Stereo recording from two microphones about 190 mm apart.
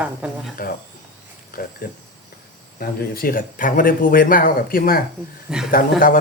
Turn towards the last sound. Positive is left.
turn(degrees=45)  # may be behind; listen again after turning